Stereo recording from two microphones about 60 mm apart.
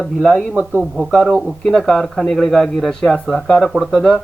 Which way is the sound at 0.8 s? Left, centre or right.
Centre.